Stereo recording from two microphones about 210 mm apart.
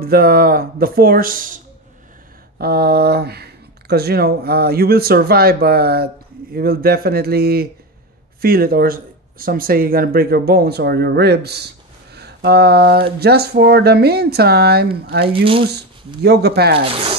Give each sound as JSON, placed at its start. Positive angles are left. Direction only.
{"t": 0.0, "sound": "speech", "side_deg": -45}
{"t": 2.6, "sound": "speech", "side_deg": -50}